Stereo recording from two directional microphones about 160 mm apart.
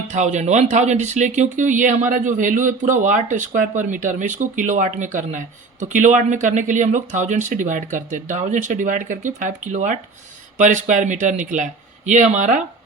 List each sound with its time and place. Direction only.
0.1 s speech: 50° right (ahead or behind)